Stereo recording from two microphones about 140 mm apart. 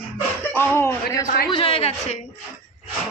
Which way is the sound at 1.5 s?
40° left (ahead or behind).